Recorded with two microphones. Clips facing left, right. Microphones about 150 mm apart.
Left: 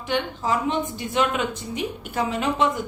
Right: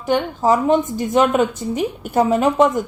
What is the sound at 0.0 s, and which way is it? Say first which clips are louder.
A woman's voice: right 8 dB; 45° right (ahead or behind).